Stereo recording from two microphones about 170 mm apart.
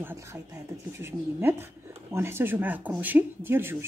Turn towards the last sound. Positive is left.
turn(degrees=-15)  # may be behind; listen again after turning